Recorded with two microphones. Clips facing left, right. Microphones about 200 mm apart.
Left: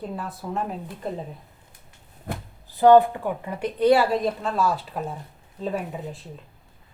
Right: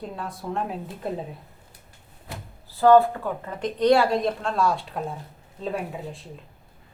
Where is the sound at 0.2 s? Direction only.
Centre (ahead or behind).